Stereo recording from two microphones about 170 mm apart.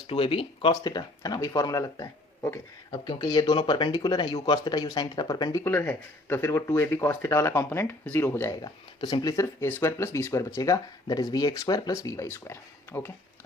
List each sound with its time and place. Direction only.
0.1 s speech: 35° left (ahead or behind); by 13.1 s 15° left (ahead or behind)